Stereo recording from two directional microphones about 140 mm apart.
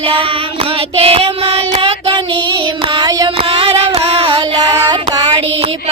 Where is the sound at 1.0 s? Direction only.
45° right (ahead or behind).